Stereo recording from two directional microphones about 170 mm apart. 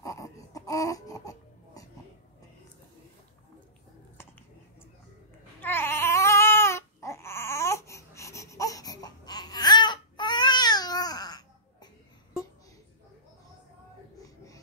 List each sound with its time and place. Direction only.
0.0 s baby cry: 20° left (ahead or behind)
5.6 s baby cry: 15° left (ahead or behind)
14.2 s a sound: 20° left (ahead or behind)